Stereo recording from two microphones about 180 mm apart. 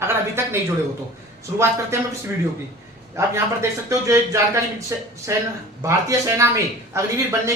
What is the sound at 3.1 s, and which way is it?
Speech, 15° right (ahead or behind).